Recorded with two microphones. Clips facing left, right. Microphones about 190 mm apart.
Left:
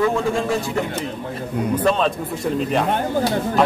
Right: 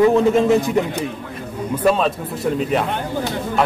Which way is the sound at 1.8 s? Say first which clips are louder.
Right 4 dB; 5° right (ahead or behind).